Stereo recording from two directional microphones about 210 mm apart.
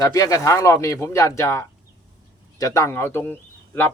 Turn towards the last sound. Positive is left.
turn(degrees=10)  # may be behind; listen again after turning